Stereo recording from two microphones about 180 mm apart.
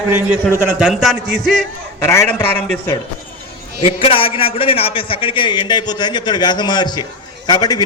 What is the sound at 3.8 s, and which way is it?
Speech, 30° left (ahead or behind).